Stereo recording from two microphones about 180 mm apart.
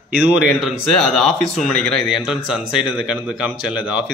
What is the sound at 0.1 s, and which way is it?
Speech, 10° right (ahead or behind).